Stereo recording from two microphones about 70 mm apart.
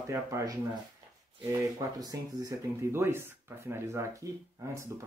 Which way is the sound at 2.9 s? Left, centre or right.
Right.